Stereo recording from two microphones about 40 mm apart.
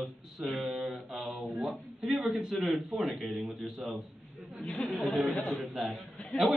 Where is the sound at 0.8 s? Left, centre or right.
Centre.